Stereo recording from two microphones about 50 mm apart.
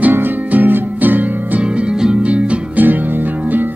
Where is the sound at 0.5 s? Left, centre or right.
Right.